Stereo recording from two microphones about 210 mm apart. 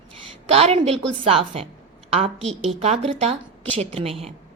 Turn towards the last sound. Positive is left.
turn(degrees=-25)  # may be behind; listen again after turning